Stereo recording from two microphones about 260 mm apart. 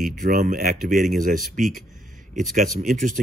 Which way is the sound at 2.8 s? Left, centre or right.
Right.